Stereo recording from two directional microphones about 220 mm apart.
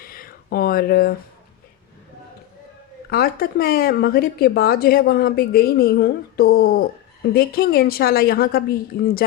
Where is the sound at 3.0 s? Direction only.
45° left (ahead or behind).